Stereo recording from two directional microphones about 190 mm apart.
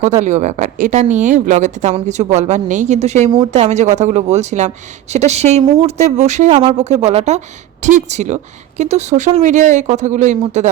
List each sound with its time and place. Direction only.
0.2 s speech: 35° right (ahead or behind)
3.2 s speech: 20° right (ahead or behind)
3.5 s speech: 35° right (ahead or behind)